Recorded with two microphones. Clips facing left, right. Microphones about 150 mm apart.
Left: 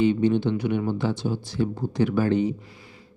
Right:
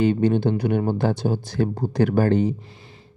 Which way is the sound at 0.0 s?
45° right (ahead or behind).